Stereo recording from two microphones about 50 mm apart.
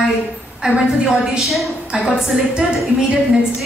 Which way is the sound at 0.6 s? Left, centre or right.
Centre.